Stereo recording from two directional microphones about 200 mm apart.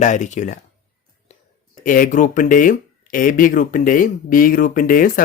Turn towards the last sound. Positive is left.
turn(degrees=45)  # may be behind; listen again after turning